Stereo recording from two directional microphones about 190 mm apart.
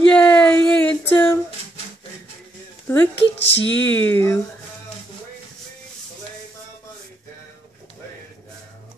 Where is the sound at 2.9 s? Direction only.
10° left (ahead or behind).